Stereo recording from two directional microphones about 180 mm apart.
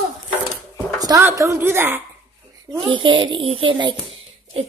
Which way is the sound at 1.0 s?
15° right (ahead or behind).